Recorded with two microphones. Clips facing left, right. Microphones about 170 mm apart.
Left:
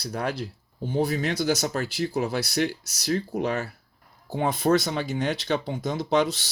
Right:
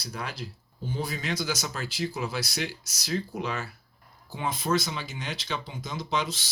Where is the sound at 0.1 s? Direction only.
60° left (ahead or behind).